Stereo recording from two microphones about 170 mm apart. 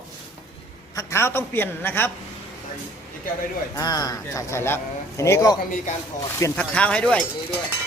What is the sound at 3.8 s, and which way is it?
Speech, 25° left (ahead or behind).